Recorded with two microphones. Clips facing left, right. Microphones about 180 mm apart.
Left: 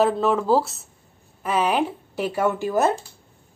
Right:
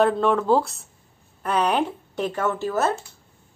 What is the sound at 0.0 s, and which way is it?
A woman's voice, 5° left (ahead or behind).